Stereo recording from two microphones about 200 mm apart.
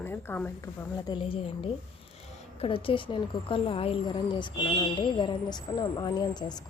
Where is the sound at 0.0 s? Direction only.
10° left (ahead or behind).